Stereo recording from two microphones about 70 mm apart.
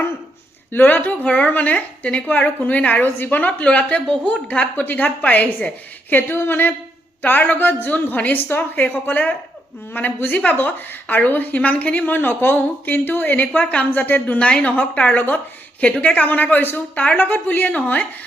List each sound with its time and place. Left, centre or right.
0.7 s a woman's voice: left